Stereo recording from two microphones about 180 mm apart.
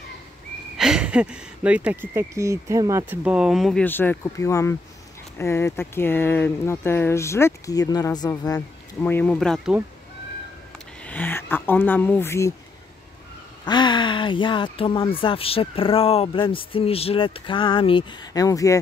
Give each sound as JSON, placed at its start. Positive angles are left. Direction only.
{"t": 0.7, "sound": "speech", "side_deg": -5}
{"t": 3.3, "sound": "speech", "side_deg": -5}
{"t": 11.1, "sound": "speech", "side_deg": 10}
{"t": 13.7, "sound": "speech", "side_deg": 25}